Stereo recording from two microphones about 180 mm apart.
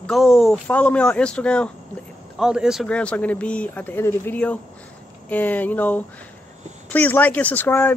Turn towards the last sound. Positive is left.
turn(degrees=10)  # may be behind; listen again after turning